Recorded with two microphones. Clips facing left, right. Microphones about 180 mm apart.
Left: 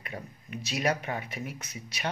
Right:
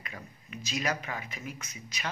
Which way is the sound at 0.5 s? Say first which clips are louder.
Left 4 dB; 65° left (ahead or behind).